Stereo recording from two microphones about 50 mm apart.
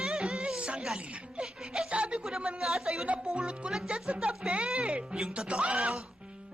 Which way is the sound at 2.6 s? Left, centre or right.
Centre.